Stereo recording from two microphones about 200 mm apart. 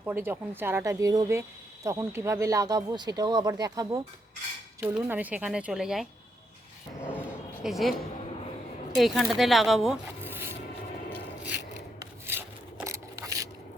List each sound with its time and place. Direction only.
0.0 s speech: 10° right (ahead or behind)
4.8 s speech: 5° right (ahead or behind)
7.1 s speech: 5° right (ahead or behind)
9.0 s speech: centre (ahead or behind)
12.2 s a sound: 10° right (ahead or behind)